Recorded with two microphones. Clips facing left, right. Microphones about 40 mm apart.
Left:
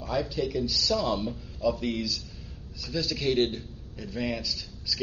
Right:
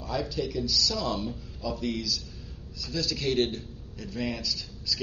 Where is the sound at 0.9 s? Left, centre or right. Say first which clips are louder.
Left 3 dB; centre.